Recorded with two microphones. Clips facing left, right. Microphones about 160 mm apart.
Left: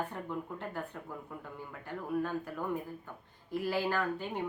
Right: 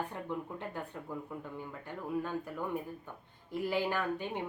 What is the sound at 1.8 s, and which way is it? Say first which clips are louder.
Speech: left 3 dB; 15° right (ahead or behind).